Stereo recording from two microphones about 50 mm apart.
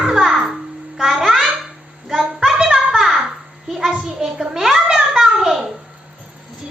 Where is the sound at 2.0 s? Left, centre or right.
Centre.